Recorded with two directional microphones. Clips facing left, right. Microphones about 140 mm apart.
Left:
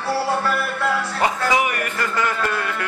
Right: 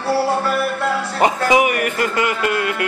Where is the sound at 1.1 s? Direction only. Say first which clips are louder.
Right 7 dB; 20° right (ahead or behind).